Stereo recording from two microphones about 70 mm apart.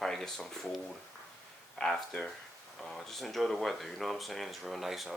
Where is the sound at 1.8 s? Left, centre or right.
Centre.